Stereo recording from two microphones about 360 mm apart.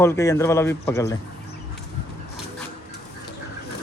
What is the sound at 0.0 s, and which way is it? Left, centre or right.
Speech, centre.